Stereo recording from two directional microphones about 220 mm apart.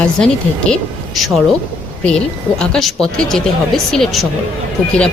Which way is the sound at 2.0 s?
5° left (ahead or behind).